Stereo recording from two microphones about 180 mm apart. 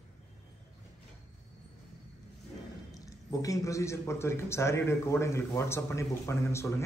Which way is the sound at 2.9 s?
20° left (ahead or behind).